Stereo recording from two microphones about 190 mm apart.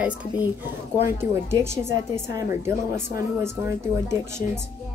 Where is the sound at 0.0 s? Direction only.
5° right (ahead or behind).